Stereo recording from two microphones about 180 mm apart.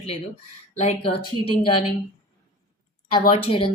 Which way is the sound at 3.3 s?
30° left (ahead or behind).